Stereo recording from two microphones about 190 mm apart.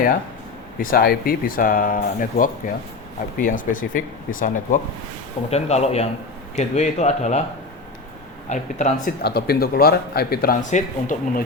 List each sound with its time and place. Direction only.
0.8 s speech: 50° left (ahead or behind)
8.4 s speech: 40° left (ahead or behind)
9.0 s speech: 55° left (ahead or behind)